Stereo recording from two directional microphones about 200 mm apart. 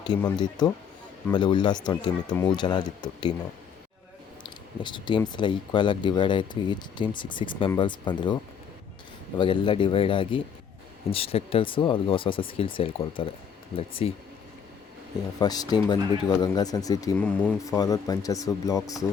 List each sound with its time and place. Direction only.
0.0 s speech: 20° left (ahead or behind)
4.4 s a sound: 25° left (ahead or behind)
5.3 s speech: 25° left (ahead or behind)
9.4 s speech: 25° left (ahead or behind)
15.4 s speech: 20° left (ahead or behind)